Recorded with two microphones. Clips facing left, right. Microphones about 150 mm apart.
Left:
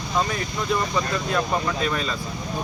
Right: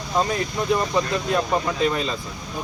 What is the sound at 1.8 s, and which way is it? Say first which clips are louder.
Speech: right 3 dB; 25° right (ahead or behind).